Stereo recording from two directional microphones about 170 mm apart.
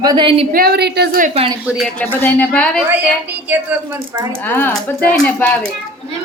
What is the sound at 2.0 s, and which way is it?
Speech, 10° left (ahead or behind).